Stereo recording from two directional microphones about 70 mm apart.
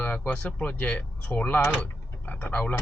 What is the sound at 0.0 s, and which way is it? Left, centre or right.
Speech, centre.